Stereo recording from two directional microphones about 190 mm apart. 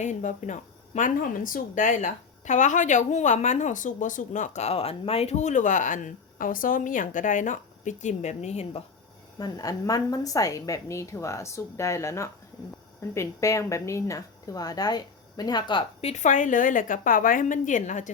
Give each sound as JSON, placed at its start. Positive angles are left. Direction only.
{"t": 0.0, "sound": "speech", "side_deg": 40}
{"t": 9.4, "sound": "a woman's voice", "side_deg": 20}